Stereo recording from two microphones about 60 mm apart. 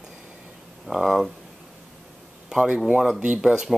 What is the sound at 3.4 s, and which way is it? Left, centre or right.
Speech, centre.